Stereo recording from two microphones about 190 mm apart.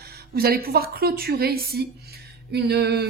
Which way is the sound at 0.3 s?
55° right (ahead or behind).